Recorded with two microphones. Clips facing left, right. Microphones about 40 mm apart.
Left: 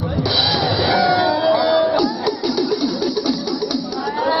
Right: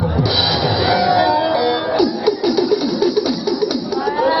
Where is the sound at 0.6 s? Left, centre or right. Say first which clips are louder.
Right 1 dB; centre.